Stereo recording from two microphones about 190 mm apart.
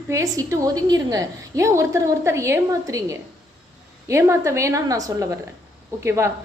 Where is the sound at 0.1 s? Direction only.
15° right (ahead or behind).